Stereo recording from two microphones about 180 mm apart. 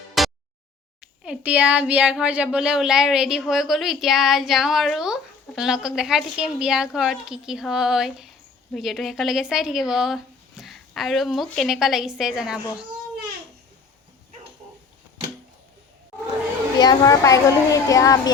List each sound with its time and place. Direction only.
0.2 s a sound: centre (ahead or behind)
1.2 s speech: 5° right (ahead or behind)
16.7 s a child's voice: 20° left (ahead or behind)